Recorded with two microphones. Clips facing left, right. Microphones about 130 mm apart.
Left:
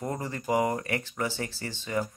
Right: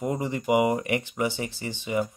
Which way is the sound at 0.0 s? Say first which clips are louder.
Right 5 dB; 15° right (ahead or behind).